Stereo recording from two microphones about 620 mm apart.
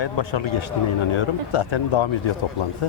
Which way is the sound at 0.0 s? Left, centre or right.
Left.